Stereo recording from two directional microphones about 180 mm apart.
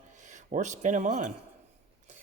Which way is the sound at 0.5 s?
40° right (ahead or behind).